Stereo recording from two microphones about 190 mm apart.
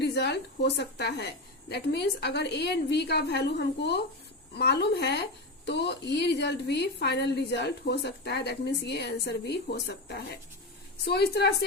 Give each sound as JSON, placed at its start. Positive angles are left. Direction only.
{"t": 0.0, "sound": "a woman's voice", "side_deg": 60}